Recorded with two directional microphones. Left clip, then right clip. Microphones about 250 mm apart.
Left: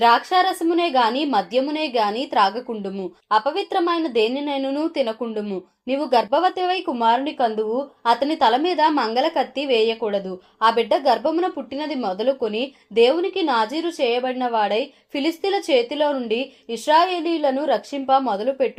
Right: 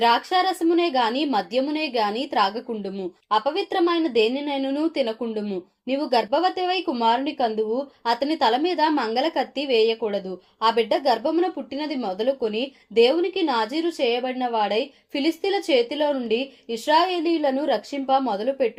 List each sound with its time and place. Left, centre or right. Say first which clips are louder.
0.0 s a woman's voice: left 3 dB; left